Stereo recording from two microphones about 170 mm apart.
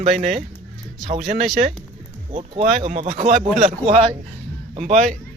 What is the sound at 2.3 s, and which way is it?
Speech, 35° right (ahead or behind).